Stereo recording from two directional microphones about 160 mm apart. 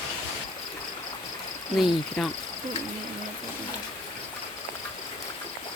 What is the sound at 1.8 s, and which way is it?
Speech, centre (ahead or behind).